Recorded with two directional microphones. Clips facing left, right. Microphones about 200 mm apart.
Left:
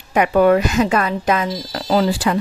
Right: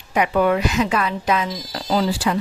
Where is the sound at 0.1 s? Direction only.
50° left (ahead or behind).